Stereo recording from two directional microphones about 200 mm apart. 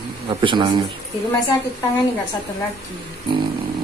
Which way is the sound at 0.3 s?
25° right (ahead or behind).